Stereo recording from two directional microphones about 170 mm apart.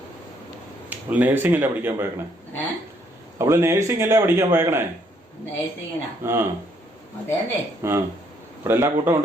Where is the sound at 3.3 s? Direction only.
15° right (ahead or behind).